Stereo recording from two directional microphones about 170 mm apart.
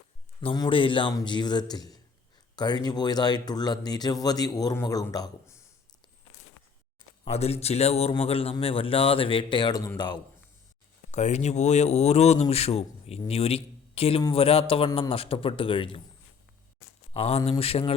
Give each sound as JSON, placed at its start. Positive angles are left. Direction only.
{"t": 0.4, "sound": "speech", "side_deg": 30}
{"t": 7.3, "sound": "speech", "side_deg": 40}
{"t": 11.1, "sound": "speech", "side_deg": 40}
{"t": 17.2, "sound": "speech", "side_deg": 35}